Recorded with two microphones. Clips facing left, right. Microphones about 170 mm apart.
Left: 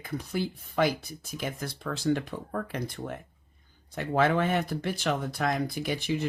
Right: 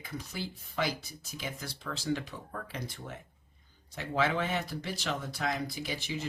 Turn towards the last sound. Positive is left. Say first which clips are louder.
# left 7 dB
turn(degrees=55)  # may be behind; listen again after turning